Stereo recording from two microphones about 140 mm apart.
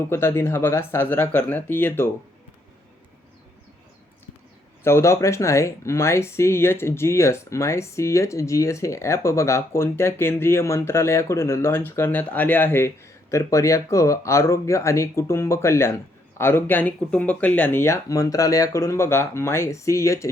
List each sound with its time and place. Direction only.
0.0 s speech: 15° left (ahead or behind)
4.8 s speech: 20° left (ahead or behind)